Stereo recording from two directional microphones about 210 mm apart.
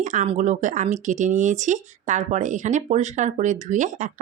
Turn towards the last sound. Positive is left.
turn(degrees=-35)  # may be behind; listen again after turning